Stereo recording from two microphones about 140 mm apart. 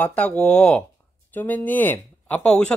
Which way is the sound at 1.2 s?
10° left (ahead or behind).